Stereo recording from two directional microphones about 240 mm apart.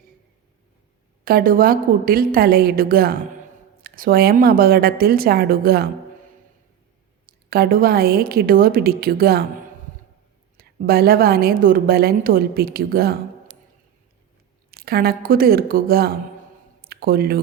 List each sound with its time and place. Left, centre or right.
1.2 s a woman's voice: right
7.3 s a woman's voice: right
10.6 s a woman's voice: right
14.7 s a woman's voice: right